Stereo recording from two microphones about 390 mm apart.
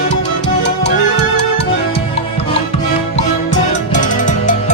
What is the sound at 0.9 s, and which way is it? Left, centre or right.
Music, left.